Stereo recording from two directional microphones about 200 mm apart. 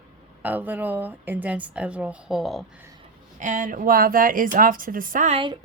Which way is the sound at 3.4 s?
40° right (ahead or behind).